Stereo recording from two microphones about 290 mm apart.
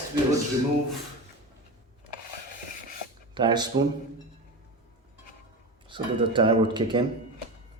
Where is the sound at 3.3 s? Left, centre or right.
Centre.